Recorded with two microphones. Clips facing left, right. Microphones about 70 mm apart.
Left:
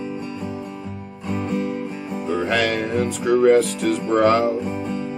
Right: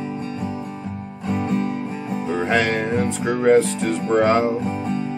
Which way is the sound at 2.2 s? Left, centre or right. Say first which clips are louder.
Even; right.